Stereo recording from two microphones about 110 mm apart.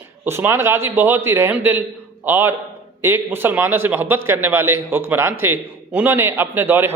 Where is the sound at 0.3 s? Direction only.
20° right (ahead or behind).